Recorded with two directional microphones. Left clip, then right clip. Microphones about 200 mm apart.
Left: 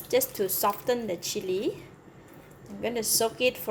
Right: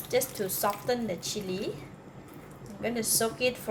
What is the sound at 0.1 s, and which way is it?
A woman's voice, 40° left (ahead or behind).